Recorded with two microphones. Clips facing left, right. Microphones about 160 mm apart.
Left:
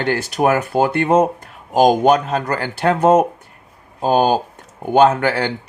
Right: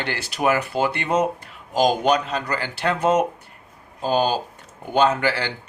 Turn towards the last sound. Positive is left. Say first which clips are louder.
# left 6 dB
turn(degrees=50)  # may be behind; listen again after turning